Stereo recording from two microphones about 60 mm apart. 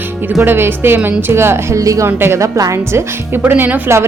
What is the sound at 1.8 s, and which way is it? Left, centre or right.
Speech, right.